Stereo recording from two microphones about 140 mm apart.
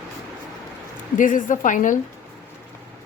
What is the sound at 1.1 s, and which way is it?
Speech, 70° left (ahead or behind).